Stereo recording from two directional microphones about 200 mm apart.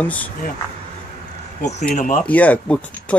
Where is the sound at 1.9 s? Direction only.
40° left (ahead or behind).